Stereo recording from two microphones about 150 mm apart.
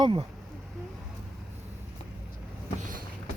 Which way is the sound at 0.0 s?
35° right (ahead or behind).